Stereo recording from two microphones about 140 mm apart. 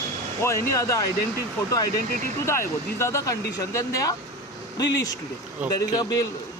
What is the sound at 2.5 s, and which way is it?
Speech, 20° left (ahead or behind).